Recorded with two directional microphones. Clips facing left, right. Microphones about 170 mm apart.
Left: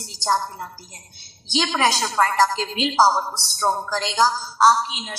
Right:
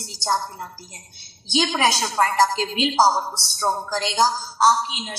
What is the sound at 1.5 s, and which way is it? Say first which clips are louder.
A woman's voice: right 1 dB; 15° right (ahead or behind).